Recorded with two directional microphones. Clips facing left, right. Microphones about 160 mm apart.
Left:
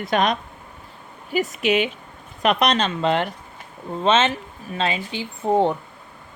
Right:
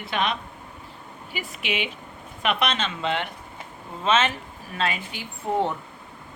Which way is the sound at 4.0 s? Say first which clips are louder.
Left 4 dB; 30° left (ahead or behind).